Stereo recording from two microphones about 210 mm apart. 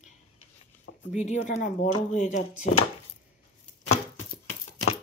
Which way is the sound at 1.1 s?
35° left (ahead or behind).